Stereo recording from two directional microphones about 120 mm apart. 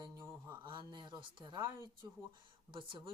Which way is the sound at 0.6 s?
40° right (ahead or behind).